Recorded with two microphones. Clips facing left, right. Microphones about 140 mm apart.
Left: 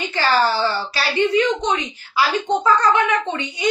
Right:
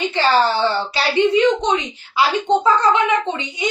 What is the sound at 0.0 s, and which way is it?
A woman's voice, 25° right (ahead or behind).